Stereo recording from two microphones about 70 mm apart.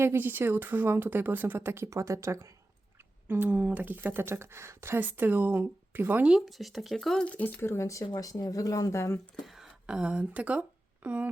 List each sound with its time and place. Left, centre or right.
0.0 s speech: right
1.9 s speech: right
3.4 s speech: right
4.9 s speech: right
6.3 s speech: centre
7.3 s speech: left
7.6 s speech: left
9.4 s a sound: centre
9.8 s speech: centre